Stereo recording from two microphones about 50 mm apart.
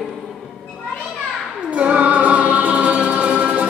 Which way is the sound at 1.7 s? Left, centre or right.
Right.